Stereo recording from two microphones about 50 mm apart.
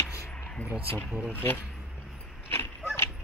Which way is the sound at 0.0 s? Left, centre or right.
Left.